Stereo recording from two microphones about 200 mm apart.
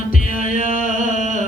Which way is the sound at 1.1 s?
35° right (ahead or behind).